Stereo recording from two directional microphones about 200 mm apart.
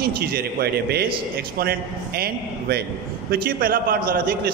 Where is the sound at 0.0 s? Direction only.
50° right (ahead or behind).